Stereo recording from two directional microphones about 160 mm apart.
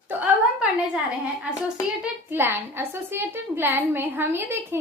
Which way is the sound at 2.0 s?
15° right (ahead or behind).